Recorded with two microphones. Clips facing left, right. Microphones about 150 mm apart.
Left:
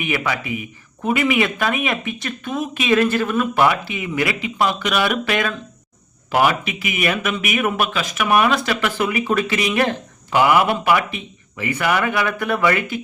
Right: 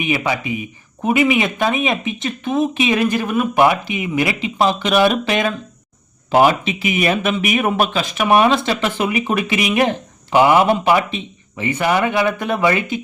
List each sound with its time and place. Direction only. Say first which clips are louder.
0.0 s speech: right 3 dB; 20° right (ahead or behind)